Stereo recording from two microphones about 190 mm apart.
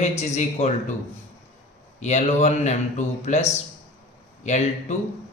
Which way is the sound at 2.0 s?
35° left (ahead or behind).